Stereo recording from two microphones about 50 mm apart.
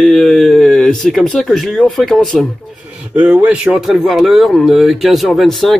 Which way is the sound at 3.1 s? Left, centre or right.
Right.